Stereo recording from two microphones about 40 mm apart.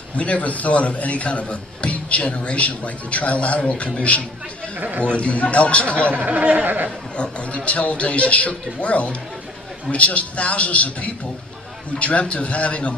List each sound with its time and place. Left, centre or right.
0.2 s a man's voice: left
4.8 s speech: right
5.0 s a man's voice: left
6.1 s speech: right
7.2 s a man's voice: left